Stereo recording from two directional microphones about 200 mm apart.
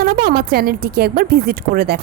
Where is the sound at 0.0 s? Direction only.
45° right (ahead or behind).